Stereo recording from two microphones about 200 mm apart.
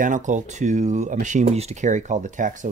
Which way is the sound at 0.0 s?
40° right (ahead or behind).